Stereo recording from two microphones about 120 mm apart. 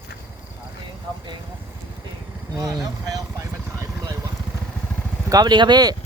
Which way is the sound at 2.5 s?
30° right (ahead or behind).